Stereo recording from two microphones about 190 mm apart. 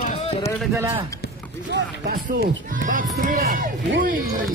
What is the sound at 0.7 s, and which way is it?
Speech, 15° right (ahead or behind).